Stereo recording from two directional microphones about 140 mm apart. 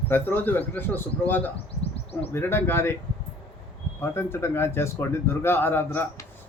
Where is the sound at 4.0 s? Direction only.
15° left (ahead or behind).